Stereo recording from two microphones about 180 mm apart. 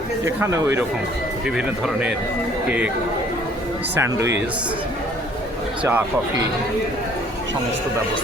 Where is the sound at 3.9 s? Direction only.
15° right (ahead or behind).